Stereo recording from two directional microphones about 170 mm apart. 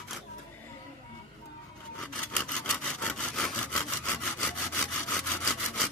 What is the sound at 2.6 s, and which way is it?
Sawing, 5° left (ahead or behind).